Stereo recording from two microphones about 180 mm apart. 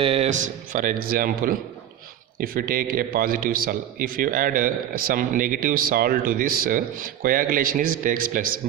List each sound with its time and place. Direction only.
0.0 s a man's voice: 35° right (ahead or behind); by 8.5 s 50° right (ahead or behind)